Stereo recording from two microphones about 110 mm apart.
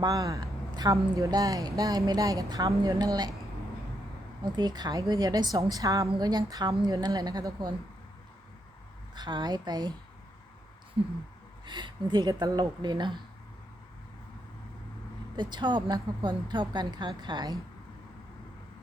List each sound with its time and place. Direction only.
0.0 s a woman's voice: 30° right (ahead or behind)
4.5 s a woman's voice: 40° right (ahead or behind)
9.1 s a woman's voice: 40° right (ahead or behind)
11.6 s speech: 45° right (ahead or behind)
12.3 s a woman's voice: 35° right (ahead or behind)
15.4 s a woman's voice: 45° right (ahead or behind)